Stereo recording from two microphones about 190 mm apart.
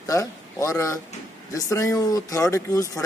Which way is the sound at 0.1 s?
15° left (ahead or behind).